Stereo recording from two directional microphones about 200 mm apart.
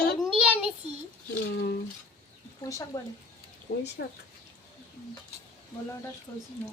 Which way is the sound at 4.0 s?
55° left (ahead or behind).